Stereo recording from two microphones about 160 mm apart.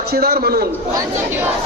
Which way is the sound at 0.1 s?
70° right (ahead or behind).